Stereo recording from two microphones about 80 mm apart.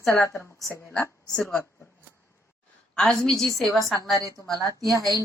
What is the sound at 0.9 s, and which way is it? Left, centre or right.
Speech, centre.